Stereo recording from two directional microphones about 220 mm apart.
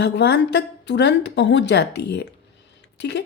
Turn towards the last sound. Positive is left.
turn(degrees=50)  # may be behind; listen again after turning